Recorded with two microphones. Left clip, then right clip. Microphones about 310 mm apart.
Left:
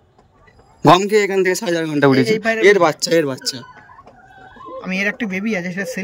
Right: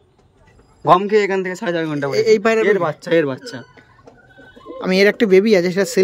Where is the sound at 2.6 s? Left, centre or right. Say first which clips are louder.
Left 5 dB; left.